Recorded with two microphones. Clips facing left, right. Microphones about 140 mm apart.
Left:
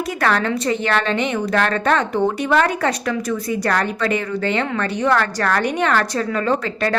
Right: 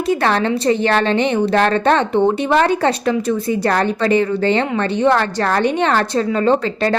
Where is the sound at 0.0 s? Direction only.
25° right (ahead or behind).